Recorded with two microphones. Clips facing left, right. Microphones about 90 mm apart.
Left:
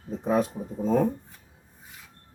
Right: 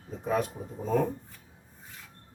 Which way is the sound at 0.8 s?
15° left (ahead or behind).